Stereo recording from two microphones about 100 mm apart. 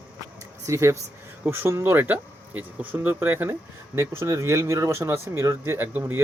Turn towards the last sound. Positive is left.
turn(degrees=-20)  # may be behind; listen again after turning